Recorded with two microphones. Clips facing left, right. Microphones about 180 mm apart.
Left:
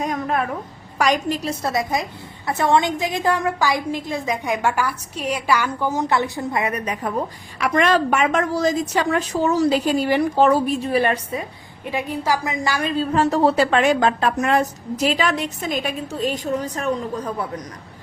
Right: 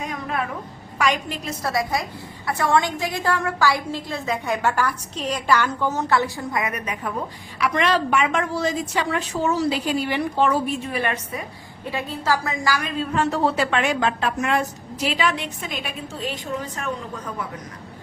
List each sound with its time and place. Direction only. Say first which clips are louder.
0.0 s a sound: left 5 dB; 40° left (ahead or behind)
0.9 s a woman's voice: left 4 dB; 40° left (ahead or behind)
1.6 s a woman's voice: even; 20° left (ahead or behind)
7.6 s a woman's voice: left 3 dB; 45° left (ahead or behind); by 11.4 s 30° left (ahead or behind)
11.9 s a woman's voice: left 2 dB; 15° left (ahead or behind); by 17.3 s 35° left (ahead or behind)